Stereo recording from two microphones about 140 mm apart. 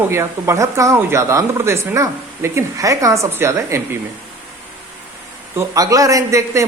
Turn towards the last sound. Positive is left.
turn(degrees=-20)  # may be behind; listen again after turning